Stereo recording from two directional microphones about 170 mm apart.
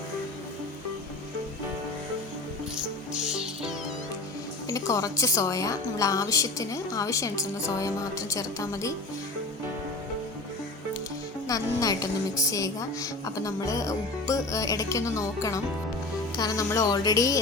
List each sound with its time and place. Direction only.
2.7 s music: 5° right (ahead or behind)
4.7 s a woman's voice: 20° left (ahead or behind)
11.4 s a woman's voice: 20° left (ahead or behind)